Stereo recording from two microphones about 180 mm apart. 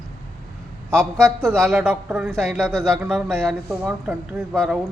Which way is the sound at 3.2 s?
15° right (ahead or behind).